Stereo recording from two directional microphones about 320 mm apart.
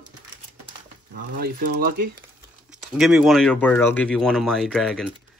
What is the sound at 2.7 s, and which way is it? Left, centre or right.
Speech, centre.